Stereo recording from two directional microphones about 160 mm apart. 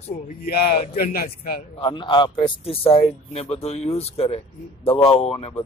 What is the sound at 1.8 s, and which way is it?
A man's voice, 30° left (ahead or behind).